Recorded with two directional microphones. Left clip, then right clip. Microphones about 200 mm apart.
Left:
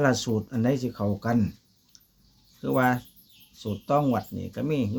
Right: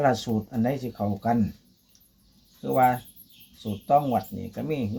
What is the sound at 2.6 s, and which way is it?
Speech, 50° left (ahead or behind).